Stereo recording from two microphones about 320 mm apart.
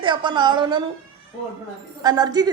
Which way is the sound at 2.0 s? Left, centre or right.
Centre.